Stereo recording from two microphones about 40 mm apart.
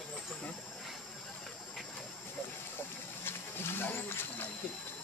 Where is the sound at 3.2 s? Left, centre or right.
Left.